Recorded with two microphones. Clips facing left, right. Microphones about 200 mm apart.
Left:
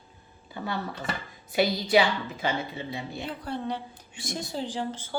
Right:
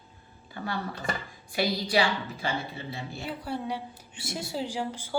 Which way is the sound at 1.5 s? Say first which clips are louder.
Left 4 dB; 20° left (ahead or behind).